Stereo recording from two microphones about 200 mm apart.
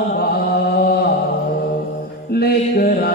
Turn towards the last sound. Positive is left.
turn(degrees=50)  # may be behind; listen again after turning